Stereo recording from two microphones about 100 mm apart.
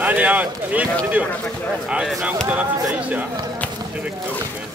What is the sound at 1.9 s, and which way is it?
Speech, 5° right (ahead or behind).